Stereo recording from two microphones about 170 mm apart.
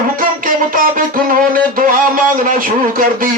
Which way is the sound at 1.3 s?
55° right (ahead or behind).